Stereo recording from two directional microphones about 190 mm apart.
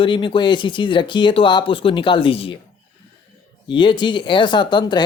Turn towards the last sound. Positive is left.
turn(degrees=25)  # may be behind; listen again after turning